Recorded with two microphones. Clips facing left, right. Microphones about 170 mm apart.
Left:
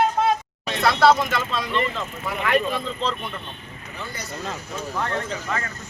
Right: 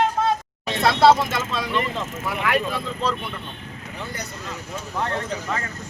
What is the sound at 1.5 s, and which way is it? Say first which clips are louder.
Speech: even; 10° right (ahead or behind).